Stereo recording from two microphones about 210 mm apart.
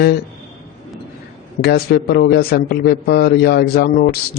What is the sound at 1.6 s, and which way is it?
A man's voice, 50° left (ahead or behind).